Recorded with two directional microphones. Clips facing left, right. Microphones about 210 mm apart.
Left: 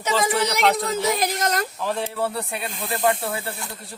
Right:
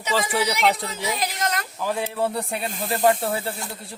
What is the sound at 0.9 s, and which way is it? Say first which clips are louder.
Speech: left 5 dB; 45° left (ahead or behind).